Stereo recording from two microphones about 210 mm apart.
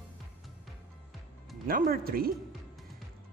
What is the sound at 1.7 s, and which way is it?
Speech, 45° right (ahead or behind).